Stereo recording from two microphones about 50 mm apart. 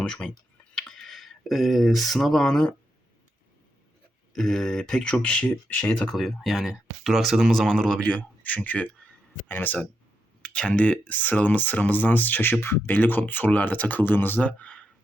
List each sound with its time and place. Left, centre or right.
0.0 s speech: left
0.8 s speech: centre
4.4 s speech: centre
5.0 s speech: left
6.1 s speech: centre
7.9 s speech: left
9.5 s speech: left
10.4 s speech: left
14.4 s speech: left